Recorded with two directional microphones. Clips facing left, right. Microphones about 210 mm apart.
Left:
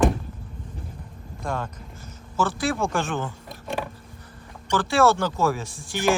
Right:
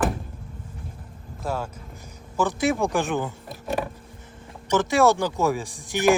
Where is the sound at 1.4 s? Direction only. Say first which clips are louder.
Right 1 dB; 5° right (ahead or behind).